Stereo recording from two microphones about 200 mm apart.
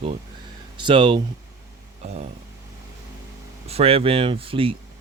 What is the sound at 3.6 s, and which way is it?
Speech, 30° right (ahead or behind).